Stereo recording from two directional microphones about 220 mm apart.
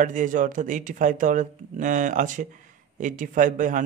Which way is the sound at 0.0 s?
35° right (ahead or behind).